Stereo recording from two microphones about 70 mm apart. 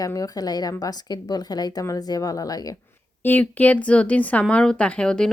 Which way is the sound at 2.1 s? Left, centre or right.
Left.